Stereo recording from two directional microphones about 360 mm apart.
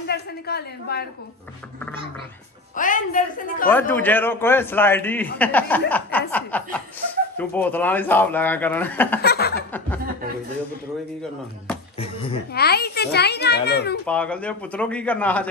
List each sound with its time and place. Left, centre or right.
0.0 s a child's voice: left
2.7 s a child's voice: left
3.7 s a man's voice: centre
9.2 s a child's voice: left
9.7 s a man's voice: centre
12.0 s speech: centre
12.5 s a child's voice: left
14.0 s a man's voice: centre